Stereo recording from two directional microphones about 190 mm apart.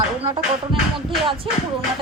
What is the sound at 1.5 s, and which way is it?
Speech, 25° right (ahead or behind).